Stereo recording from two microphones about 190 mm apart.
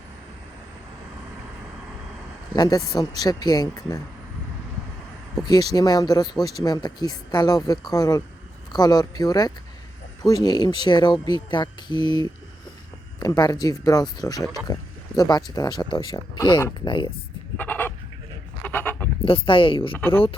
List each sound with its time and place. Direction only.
2.5 s speech: 20° left (ahead or behind)
5.4 s speech: 20° left (ahead or behind)
17.6 s a sound: 10° left (ahead or behind)
18.6 s sheep: 10° left (ahead or behind)
19.2 s speech: 30° left (ahead or behind)
19.9 s speech: 10° left (ahead or behind)